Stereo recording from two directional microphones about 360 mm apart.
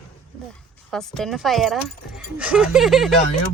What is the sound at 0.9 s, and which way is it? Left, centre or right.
Speech, centre.